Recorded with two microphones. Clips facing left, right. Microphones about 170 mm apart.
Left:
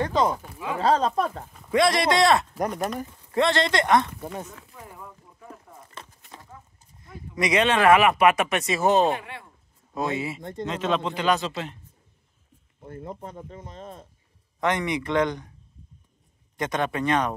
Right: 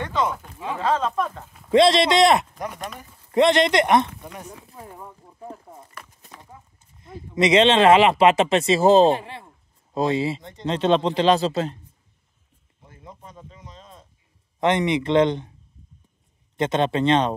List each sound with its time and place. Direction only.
0.0 s speech: 35° left (ahead or behind)
1.7 s speech: 25° right (ahead or behind)
4.6 s a sound: 30° right (ahead or behind)
6.5 s speech: 20° right (ahead or behind)
12.8 s speech: 55° left (ahead or behind)
14.6 s speech: 20° right (ahead or behind)
16.5 s speech: 25° right (ahead or behind)